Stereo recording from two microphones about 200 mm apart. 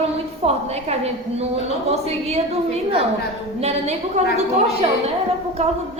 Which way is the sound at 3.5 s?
35° right (ahead or behind).